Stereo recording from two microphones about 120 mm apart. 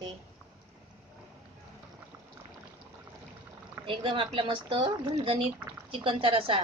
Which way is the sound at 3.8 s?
45° right (ahead or behind).